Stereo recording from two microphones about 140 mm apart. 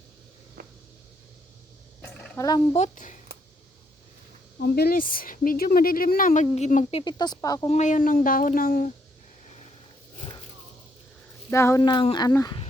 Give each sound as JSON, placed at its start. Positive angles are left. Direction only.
{"t": 2.0, "sound": "a sound", "side_deg": 15}
{"t": 2.7, "sound": "speech", "side_deg": 60}
{"t": 4.7, "sound": "speech", "side_deg": 90}
{"t": 7.0, "sound": "speech", "side_deg": 30}
{"t": 7.7, "sound": "speech", "side_deg": 60}
{"t": 11.5, "sound": "speech", "side_deg": 20}
{"t": 11.8, "sound": "speech", "side_deg": 35}